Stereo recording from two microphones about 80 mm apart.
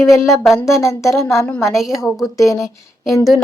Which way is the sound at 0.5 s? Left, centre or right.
Left.